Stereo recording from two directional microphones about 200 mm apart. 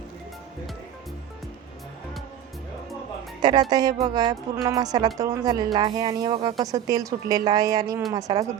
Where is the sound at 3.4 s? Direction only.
20° right (ahead or behind).